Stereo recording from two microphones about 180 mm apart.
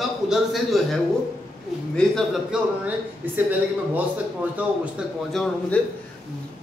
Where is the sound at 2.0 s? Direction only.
Centre (ahead or behind).